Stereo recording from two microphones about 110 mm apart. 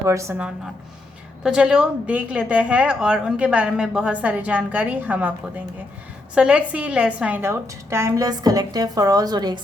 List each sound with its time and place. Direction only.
0.0 s a woman's voice: 25° right (ahead or behind)
0.3 s a woman's voice: 10° right (ahead or behind)
6.3 s a woman's voice: 10° right (ahead or behind); by 9.6 s 40° right (ahead or behind)